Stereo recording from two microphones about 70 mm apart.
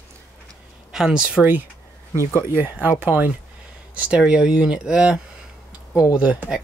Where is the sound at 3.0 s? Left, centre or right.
Right.